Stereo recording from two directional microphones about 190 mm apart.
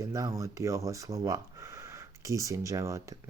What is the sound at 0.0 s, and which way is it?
Speech, 15° right (ahead or behind).